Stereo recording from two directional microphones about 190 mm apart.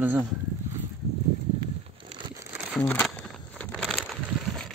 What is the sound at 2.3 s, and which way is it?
Crumpling, 15° right (ahead or behind).